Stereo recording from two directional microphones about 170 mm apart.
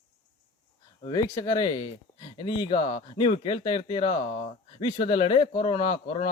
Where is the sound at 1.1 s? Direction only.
20° left (ahead or behind).